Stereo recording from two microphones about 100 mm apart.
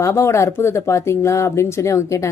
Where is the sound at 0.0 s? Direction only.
30° left (ahead or behind).